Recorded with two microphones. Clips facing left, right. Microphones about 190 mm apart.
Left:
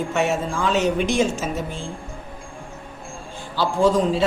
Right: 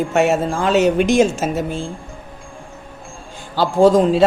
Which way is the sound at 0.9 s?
75° right (ahead or behind).